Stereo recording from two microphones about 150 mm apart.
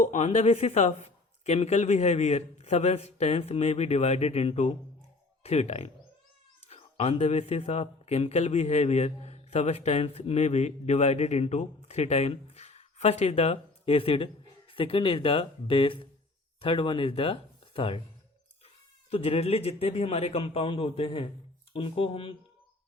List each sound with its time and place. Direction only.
0.0 s a man's voice: 50° left (ahead or behind)
19.1 s a man's voice: 45° left (ahead or behind)